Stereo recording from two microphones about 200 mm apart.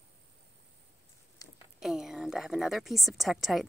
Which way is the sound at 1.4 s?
15° left (ahead or behind).